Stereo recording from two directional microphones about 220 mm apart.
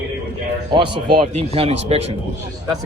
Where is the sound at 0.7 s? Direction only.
20° right (ahead or behind).